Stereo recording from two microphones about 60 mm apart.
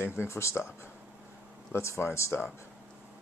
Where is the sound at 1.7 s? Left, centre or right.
Left.